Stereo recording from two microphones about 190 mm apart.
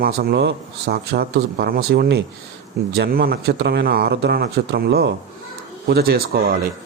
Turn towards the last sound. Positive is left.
turn(degrees=-55)  # may be behind; listen again after turning